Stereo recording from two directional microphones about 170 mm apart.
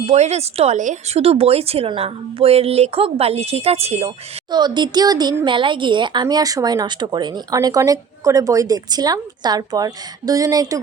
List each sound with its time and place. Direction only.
0.1 s speech: 40° right (ahead or behind)
4.5 s speech: 25° right (ahead or behind)